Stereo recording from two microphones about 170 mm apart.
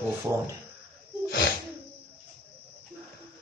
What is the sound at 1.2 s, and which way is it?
Snort, 70° left (ahead or behind).